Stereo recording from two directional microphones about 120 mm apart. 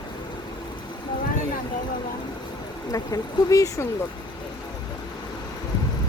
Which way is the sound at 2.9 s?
30° left (ahead or behind).